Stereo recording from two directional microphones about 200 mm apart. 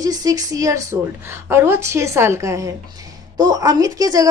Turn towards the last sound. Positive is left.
turn(degrees=-20)  # may be behind; listen again after turning